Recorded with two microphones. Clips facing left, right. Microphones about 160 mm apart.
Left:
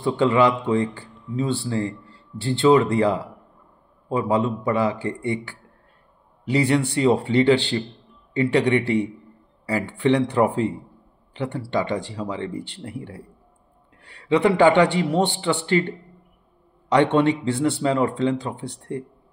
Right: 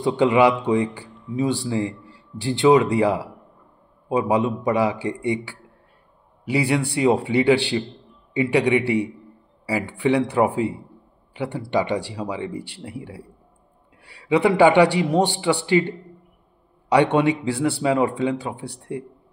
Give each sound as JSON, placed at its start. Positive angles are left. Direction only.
{"t": 0.0, "sound": "speech", "side_deg": -15}
{"t": 16.9, "sound": "speech", "side_deg": -10}